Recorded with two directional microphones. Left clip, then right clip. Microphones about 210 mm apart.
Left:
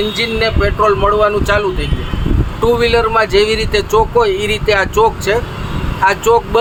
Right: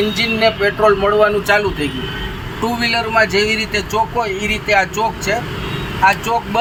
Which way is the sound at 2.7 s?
25° left (ahead or behind).